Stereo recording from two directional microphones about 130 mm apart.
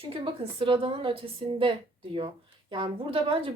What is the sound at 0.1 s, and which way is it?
A woman's voice, 45° right (ahead or behind).